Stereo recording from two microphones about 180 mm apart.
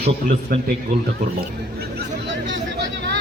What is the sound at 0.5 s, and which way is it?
Speech, 55° right (ahead or behind).